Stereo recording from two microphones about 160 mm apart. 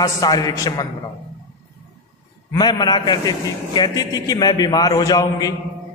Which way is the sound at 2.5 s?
25° left (ahead or behind).